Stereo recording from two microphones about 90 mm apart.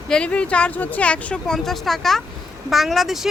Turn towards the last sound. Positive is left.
turn(degrees=-5)  # may be behind; listen again after turning